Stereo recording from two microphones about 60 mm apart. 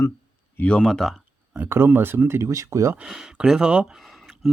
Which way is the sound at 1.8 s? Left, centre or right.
Right.